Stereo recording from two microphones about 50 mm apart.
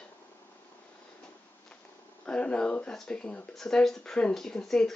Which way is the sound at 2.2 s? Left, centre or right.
Left.